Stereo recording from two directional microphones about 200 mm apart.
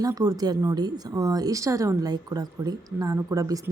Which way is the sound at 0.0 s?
20° right (ahead or behind).